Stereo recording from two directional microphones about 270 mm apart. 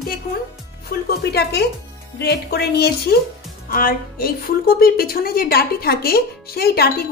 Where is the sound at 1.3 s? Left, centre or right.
Left.